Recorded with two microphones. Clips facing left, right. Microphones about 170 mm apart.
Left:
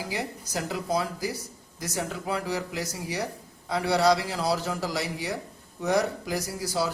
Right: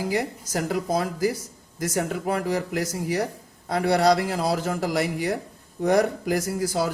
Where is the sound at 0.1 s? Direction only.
50° right (ahead or behind).